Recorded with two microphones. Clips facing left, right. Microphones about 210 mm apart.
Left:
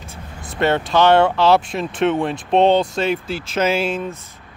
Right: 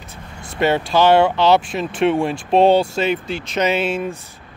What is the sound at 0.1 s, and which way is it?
Vehicle, 20° left (ahead or behind).